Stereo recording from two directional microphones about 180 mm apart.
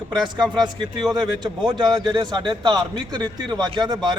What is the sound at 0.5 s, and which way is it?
A man's voice, 25° right (ahead or behind).